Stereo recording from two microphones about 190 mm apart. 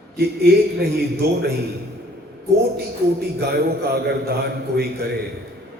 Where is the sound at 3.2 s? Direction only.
55° right (ahead or behind).